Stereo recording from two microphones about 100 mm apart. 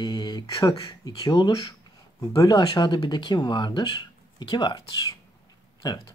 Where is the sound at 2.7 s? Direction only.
50° left (ahead or behind).